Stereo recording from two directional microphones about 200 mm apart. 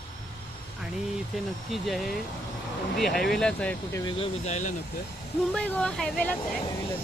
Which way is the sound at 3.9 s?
25° left (ahead or behind).